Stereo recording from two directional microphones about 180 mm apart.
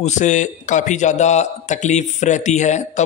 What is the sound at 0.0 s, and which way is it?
A man's voice, 40° left (ahead or behind).